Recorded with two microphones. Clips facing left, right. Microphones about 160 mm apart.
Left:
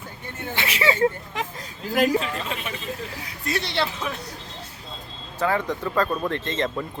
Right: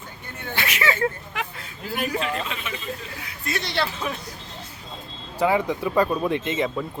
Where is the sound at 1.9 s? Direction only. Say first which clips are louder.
Left 7 dB; 90° left.